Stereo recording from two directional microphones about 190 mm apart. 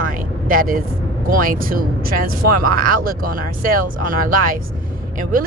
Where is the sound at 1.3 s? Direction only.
50° right (ahead or behind).